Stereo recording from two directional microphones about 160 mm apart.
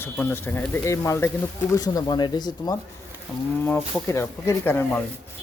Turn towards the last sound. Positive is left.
turn(degrees=15)  # may be behind; listen again after turning